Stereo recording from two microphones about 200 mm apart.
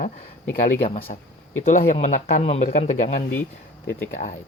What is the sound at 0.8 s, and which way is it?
Speech, 30° left (ahead or behind).